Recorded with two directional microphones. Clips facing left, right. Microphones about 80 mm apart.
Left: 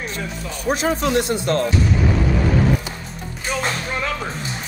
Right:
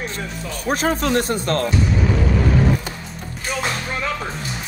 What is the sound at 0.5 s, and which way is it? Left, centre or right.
Speech, right.